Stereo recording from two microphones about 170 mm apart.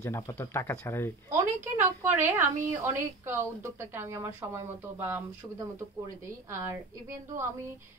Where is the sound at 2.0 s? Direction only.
15° right (ahead or behind).